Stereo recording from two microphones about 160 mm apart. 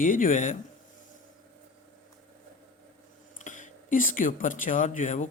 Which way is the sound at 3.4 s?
50° left (ahead or behind).